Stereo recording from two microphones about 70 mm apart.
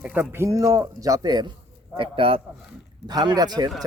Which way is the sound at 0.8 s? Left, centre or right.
Right.